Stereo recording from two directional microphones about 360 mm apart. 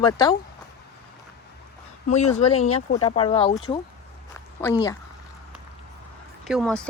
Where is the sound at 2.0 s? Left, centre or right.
Centre.